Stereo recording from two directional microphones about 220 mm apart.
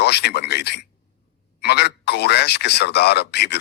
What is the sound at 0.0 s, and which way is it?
A man's voice, 50° left (ahead or behind).